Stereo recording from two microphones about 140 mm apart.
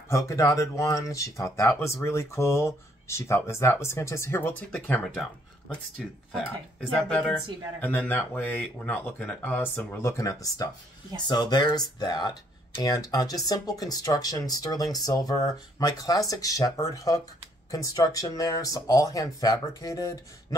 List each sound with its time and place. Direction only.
0.1 s speech: 20° left (ahead or behind)
5.1 s speech: centre (ahead or behind); by 20.2 s 25° left (ahead or behind)